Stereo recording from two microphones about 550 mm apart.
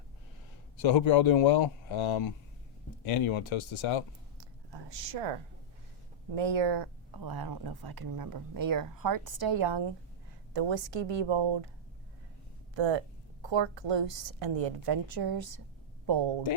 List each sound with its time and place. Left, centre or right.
0.8 s a man's voice: left
4.4 s a sound: right
6.3 s speech: right
12.7 s a woman's voice: right
14.8 s speech: right